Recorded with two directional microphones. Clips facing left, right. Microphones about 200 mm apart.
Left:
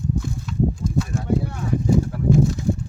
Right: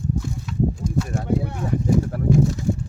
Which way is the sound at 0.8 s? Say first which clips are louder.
Left 1 dB; 5° right (ahead or behind).